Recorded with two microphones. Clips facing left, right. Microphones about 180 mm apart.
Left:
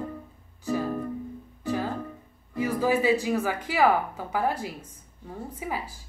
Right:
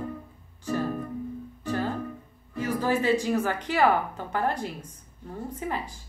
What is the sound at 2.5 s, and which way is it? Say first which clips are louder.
Speech: left 2 dB; 10° left (ahead or behind).